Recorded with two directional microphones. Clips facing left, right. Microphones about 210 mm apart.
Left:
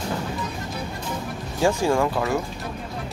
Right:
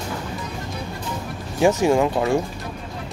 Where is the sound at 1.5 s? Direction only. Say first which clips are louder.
Right 4 dB; 20° right (ahead or behind).